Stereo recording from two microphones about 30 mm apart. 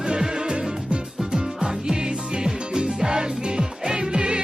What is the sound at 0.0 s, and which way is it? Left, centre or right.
Music, right.